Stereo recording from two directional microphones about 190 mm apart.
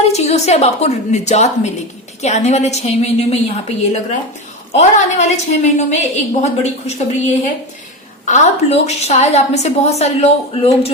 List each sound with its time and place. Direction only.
0.1 s a woman's voice: 35° left (ahead or behind)